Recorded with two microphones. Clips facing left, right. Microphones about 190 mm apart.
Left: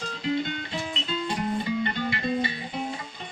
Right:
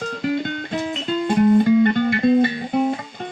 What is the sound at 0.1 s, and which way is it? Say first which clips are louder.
Music: right 3 dB; 50° right (ahead or behind).